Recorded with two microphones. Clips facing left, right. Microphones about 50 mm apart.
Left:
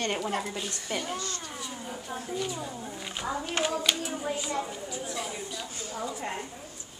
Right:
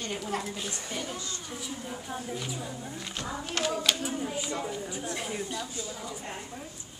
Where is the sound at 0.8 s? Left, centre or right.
Left.